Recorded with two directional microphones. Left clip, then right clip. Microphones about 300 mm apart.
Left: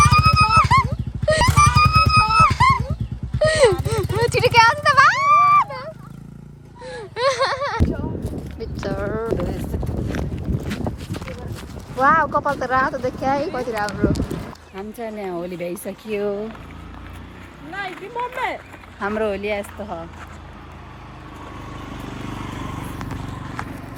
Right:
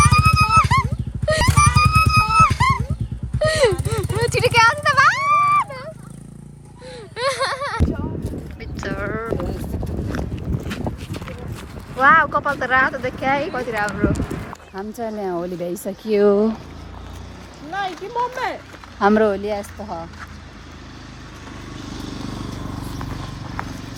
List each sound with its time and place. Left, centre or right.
0.0 s music: centre
3.3 s a sound: centre
11.9 s a sound: centre
12.6 s speech: centre
16.0 s speech: right
17.7 s run: centre
19.0 s speech: centre
19.4 s speech: centre
21.9 s vehicle: left